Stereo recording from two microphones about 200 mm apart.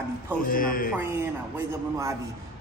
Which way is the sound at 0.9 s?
15° right (ahead or behind).